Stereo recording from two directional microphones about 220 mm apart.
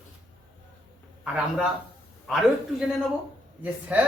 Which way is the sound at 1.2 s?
5° right (ahead or behind).